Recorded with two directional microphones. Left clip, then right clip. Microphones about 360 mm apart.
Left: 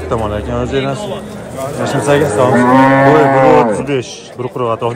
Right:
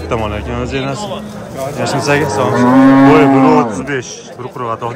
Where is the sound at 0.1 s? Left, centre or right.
Centre.